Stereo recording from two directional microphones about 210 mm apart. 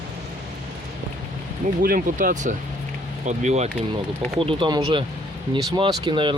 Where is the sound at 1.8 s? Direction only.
40° right (ahead or behind); by 6.4 s 25° right (ahead or behind).